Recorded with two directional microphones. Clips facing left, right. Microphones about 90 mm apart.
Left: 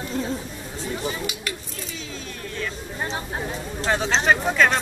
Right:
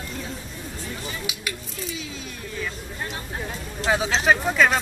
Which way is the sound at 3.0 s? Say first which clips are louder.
Left 6 dB; 30° left (ahead or behind).